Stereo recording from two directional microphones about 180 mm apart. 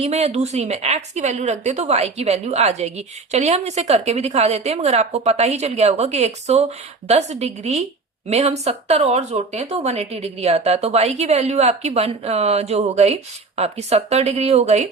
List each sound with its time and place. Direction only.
0.0 s a woman's voice: 35° right (ahead or behind)